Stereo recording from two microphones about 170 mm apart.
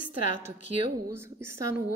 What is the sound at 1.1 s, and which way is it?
Speech, 15° right (ahead or behind).